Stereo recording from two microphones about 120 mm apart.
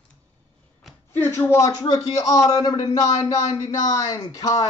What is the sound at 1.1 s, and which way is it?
A man's voice, 20° left (ahead or behind).